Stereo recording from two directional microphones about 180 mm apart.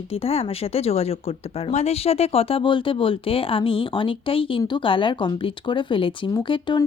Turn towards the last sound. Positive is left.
turn(degrees=25)  # may be behind; listen again after turning